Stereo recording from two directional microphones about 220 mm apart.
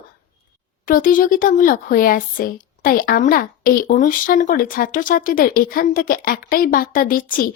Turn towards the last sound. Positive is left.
turn(degrees=40)  # may be behind; listen again after turning